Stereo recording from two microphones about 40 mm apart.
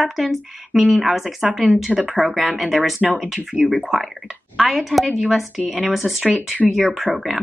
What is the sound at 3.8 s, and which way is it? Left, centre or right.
Speech, centre.